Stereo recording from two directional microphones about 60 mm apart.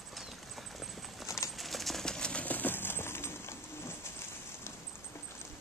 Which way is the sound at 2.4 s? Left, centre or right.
Left.